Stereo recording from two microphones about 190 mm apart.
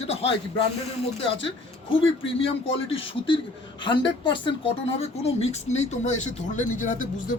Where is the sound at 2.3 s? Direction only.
30° left (ahead or behind).